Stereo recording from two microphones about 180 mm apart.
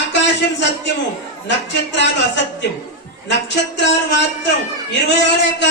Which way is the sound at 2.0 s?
75° left (ahead or behind).